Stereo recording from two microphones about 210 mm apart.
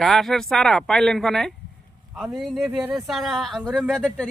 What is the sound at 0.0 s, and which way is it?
Speech, centre (ahead or behind).